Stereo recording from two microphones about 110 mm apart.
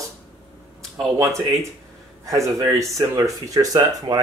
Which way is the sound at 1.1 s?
30° right (ahead or behind).